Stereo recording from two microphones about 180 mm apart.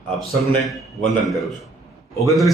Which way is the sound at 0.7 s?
Centre (ahead or behind).